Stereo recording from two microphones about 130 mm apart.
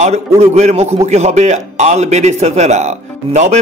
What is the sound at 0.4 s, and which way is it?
A man's voice, 55° right (ahead or behind).